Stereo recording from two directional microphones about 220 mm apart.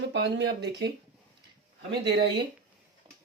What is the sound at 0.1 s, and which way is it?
A man's voice, 50° right (ahead or behind).